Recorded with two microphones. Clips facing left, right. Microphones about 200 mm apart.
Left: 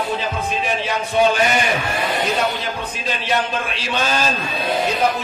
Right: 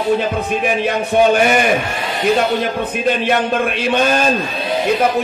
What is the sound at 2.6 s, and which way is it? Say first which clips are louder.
A man's voice: right 8 dB; 55° right (ahead or behind).